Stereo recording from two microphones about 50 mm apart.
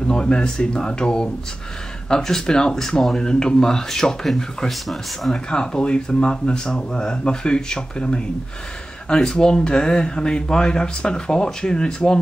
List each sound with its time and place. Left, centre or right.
0.1 s speech: centre
5.3 s speech: centre